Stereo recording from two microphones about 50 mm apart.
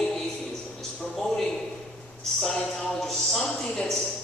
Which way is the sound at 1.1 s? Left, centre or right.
Centre.